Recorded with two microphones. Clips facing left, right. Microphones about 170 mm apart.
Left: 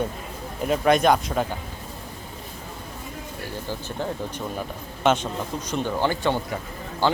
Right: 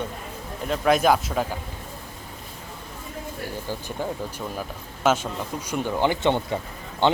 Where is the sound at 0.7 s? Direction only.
Centre (ahead or behind).